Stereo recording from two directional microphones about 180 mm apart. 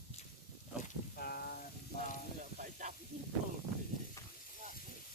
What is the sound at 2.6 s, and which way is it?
Speech, 45° right (ahead or behind).